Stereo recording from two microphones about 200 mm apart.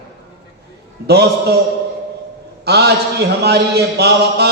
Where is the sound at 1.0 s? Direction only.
55° right (ahead or behind).